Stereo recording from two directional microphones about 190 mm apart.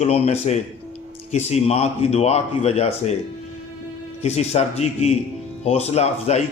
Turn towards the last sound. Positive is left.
turn(degrees=35)  # may be behind; listen again after turning